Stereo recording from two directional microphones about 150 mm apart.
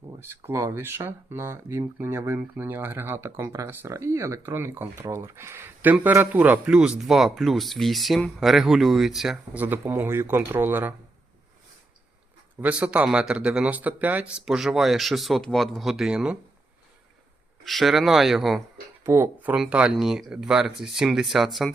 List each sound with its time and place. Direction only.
0.2 s speech: 15° right (ahead or behind)
12.5 s speech: 10° right (ahead or behind)
17.7 s speech: centre (ahead or behind)
19.0 s speech: 15° right (ahead or behind); by 21.7 s centre (ahead or behind)